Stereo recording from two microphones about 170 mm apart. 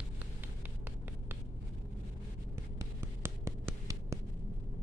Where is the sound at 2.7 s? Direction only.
15° right (ahead or behind).